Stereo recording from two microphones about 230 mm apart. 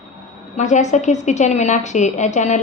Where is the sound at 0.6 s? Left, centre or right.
Left.